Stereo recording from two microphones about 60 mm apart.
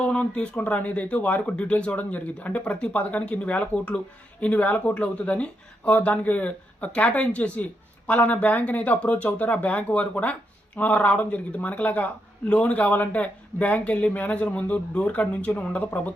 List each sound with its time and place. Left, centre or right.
0.0 s speech: centre